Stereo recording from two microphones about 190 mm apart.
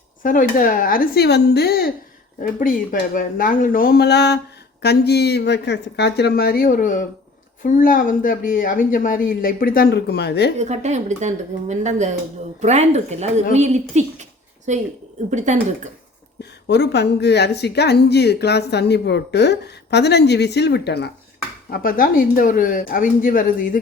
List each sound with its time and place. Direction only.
0.2 s a woman's voice: 45° left (ahead or behind)
10.6 s speech: 35° right (ahead or behind)
16.4 s a woman's voice: 60° left (ahead or behind)
21.7 s speech: 50° left (ahead or behind)